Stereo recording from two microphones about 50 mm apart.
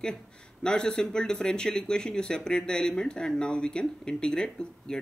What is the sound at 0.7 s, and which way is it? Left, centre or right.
Speech, centre.